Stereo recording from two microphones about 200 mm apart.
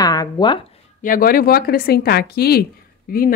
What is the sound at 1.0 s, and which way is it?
Speech, 45° left (ahead or behind).